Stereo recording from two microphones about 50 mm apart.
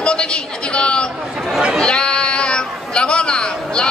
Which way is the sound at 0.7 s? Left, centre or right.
Centre.